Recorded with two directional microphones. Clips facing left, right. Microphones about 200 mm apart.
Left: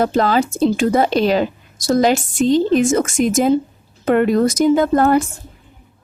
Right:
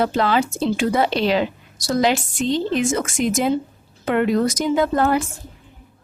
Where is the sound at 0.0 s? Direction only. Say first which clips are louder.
Left 3 dB; 45° left (ahead or behind).